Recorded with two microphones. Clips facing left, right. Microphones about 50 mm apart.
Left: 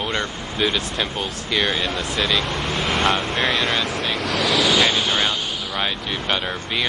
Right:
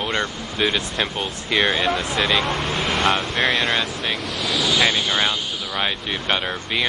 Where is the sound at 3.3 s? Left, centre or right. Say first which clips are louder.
Right 1 dB; right.